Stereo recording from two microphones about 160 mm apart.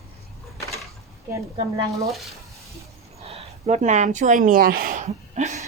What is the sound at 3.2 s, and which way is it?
Speech, 40° right (ahead or behind).